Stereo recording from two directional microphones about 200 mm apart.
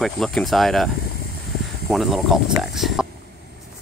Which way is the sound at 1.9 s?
Centre (ahead or behind).